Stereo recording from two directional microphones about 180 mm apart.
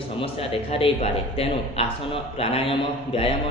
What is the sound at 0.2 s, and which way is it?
A man's voice, 30° left (ahead or behind).